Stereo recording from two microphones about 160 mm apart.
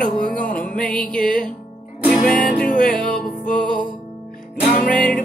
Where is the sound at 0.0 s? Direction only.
55° left (ahead or behind).